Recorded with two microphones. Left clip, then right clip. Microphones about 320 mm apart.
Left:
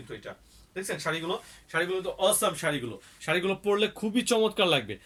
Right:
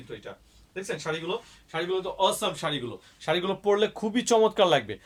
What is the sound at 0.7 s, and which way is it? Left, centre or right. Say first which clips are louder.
Speech: even; centre.